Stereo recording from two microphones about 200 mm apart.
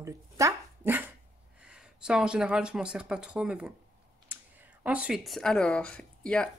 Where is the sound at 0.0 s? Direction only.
15° right (ahead or behind).